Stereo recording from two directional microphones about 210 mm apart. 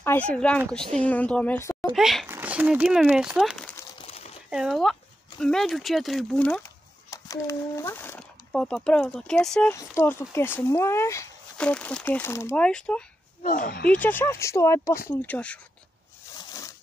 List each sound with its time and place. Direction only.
0.3 s speech: 5° left (ahead or behind)
1.9 s speech: centre (ahead or behind)
4.0 s crumpling: 30° left (ahead or behind)
4.5 s speech: centre (ahead or behind)
13.4 s speech: 40° left (ahead or behind)
13.8 s speech: 10° left (ahead or behind)
16.3 s a sound: 15° left (ahead or behind)